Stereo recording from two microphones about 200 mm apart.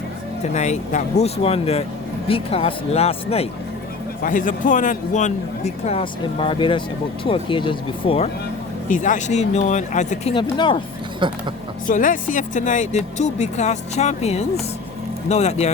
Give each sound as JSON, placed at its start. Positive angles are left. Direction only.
{"t": 0.5, "sound": "speech", "side_deg": 35}
{"t": 4.2, "sound": "speech", "side_deg": 40}
{"t": 8.9, "sound": "speech", "side_deg": 40}
{"t": 11.2, "sound": "speech", "side_deg": -25}
{"t": 11.9, "sound": "speech", "side_deg": 40}